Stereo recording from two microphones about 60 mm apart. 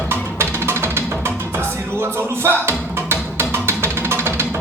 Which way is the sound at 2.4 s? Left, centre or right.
Right.